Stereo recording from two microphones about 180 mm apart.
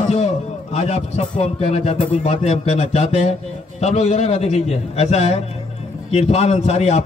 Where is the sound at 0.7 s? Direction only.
35° left (ahead or behind).